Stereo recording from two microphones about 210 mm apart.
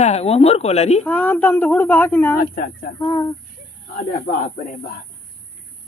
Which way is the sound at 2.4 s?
45° left (ahead or behind).